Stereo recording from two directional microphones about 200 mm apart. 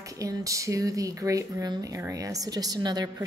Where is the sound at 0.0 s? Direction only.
15° right (ahead or behind).